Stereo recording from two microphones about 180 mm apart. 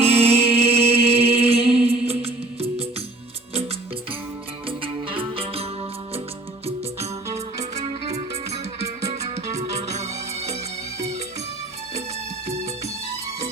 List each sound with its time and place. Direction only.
0.0 s music: 35° right (ahead or behind)
4.8 s music: 30° right (ahead or behind)
6.7 s music: 35° right (ahead or behind)